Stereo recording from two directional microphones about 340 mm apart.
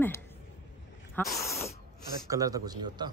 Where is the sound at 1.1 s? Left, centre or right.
Centre.